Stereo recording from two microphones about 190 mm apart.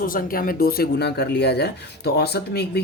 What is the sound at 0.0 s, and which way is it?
Speech, 50° left (ahead or behind).